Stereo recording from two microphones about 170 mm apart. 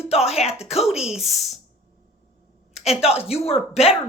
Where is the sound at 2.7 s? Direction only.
40° left (ahead or behind).